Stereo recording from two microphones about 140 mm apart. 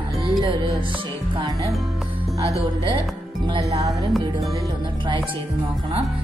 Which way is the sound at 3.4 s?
40° right (ahead or behind).